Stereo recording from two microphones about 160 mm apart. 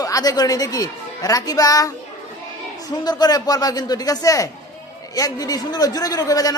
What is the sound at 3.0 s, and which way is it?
A man's voice, 25° left (ahead or behind).